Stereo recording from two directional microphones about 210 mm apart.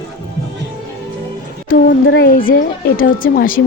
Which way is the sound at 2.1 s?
45° left (ahead or behind).